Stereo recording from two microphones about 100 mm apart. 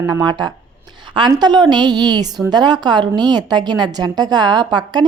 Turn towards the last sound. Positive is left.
turn(degrees=-45)  # may be behind; listen again after turning